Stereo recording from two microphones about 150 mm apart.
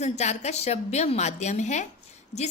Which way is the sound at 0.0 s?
50° left (ahead or behind).